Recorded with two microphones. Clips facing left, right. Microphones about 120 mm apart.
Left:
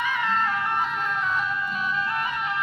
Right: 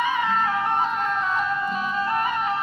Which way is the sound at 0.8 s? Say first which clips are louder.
Right 3 dB; 40° right (ahead or behind).